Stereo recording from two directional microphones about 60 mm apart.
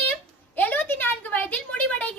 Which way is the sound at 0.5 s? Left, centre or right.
Left.